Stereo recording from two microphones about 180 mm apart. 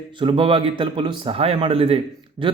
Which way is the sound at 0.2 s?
30° right (ahead or behind).